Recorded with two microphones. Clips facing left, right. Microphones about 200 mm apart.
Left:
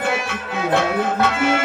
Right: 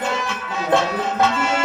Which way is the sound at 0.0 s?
55° left (ahead or behind).